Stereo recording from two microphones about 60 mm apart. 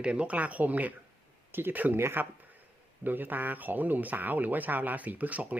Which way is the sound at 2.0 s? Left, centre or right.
Right.